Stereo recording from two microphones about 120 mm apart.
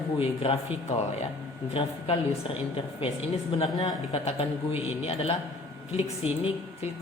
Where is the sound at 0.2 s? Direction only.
50° left (ahead or behind).